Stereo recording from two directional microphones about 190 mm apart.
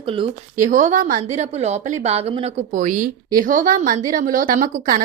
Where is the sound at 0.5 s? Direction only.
40° right (ahead or behind).